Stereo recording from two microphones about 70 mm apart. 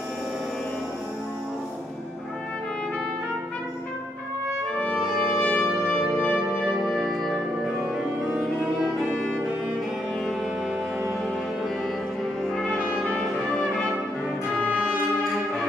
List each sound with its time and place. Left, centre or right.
4.9 s brass instrument: centre
5.4 s brass instrument: centre
6.1 s music: left
6.6 s music: centre
12.4 s brass instrument: centre
12.7 s brass instrument: centre